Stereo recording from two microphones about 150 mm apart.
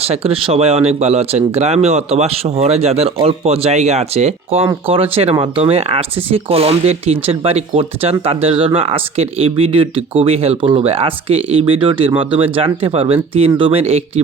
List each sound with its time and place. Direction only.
0.0 s speech: 40° right (ahead or behind)